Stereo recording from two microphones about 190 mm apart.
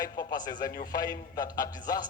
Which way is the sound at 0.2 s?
20° left (ahead or behind).